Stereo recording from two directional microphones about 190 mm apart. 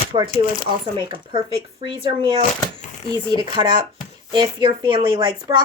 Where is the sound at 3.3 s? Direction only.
25° right (ahead or behind).